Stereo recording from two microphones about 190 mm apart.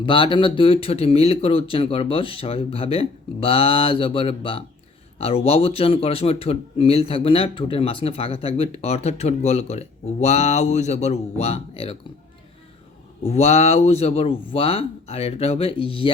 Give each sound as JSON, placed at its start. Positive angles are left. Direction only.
{"t": 0.0, "sound": "speech", "side_deg": 25}
{"t": 13.2, "sound": "speech", "side_deg": 35}